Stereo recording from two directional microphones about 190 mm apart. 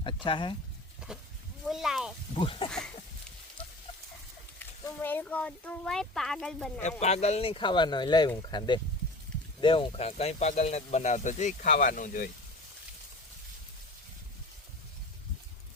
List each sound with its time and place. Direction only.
0.0 s speech: 25° left (ahead or behind)
1.6 s speech: centre (ahead or behind)
2.3 s speech: 25° left (ahead or behind)
2.6 s speech: 5° left (ahead or behind)
5.0 s speech: 10° left (ahead or behind)
7.0 s speech: 35° left (ahead or behind)